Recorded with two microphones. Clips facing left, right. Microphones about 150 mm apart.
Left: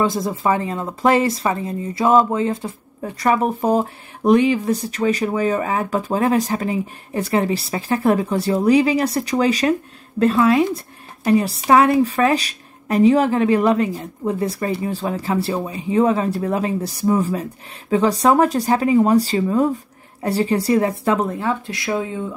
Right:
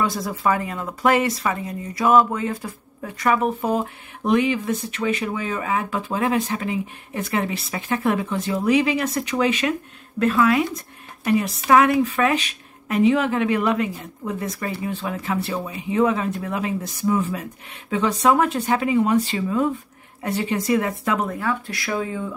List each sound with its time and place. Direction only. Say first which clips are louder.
0.0 s speech: left 3 dB; 25° left (ahead or behind)